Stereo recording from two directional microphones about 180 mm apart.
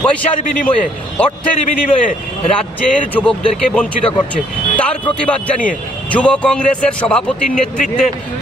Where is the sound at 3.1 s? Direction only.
5° left (ahead or behind).